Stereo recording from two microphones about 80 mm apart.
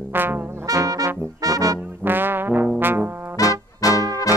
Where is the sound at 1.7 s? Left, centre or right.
Right.